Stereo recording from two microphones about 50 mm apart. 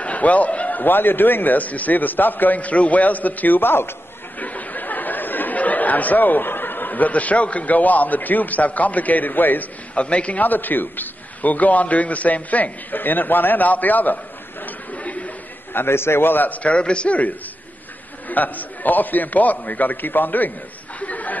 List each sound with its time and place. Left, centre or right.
0.0 s a man's voice: left
4.4 s speech: left
9.9 s a man's voice: left
15.7 s a man's voice: left
16.4 s a man's voice: left
18.3 s a man's voice: left
21.0 s a sound: left